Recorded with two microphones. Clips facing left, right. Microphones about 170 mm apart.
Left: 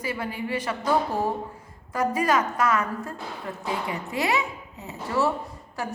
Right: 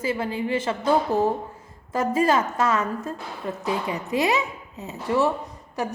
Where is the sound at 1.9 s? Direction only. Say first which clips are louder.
Right 2 dB; 25° right (ahead or behind).